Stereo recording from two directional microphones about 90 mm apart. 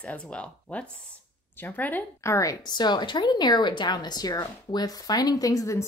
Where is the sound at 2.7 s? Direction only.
55° left (ahead or behind).